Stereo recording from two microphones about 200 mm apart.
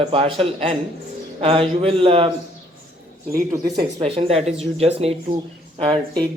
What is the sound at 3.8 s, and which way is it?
Speech, 30° right (ahead or behind).